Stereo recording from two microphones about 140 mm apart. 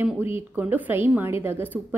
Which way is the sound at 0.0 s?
15° right (ahead or behind).